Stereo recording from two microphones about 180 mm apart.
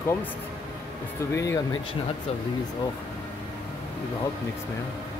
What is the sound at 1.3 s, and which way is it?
Speech, 15° left (ahead or behind).